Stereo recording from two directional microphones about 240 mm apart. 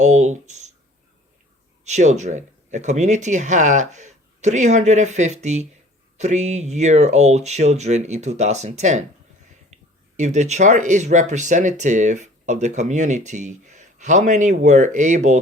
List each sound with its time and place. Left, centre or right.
0.0 s speech: right
1.8 s speech: right
10.2 s speech: right